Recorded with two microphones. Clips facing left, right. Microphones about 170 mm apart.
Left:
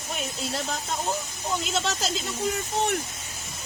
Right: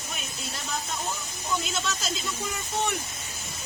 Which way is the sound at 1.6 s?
90° left.